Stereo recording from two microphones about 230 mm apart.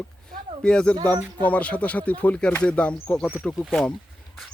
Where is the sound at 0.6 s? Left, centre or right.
Centre.